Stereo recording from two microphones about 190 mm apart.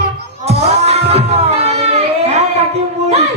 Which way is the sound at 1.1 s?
35° right (ahead or behind).